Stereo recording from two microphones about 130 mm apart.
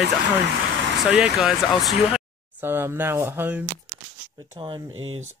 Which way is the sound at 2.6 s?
15° right (ahead or behind).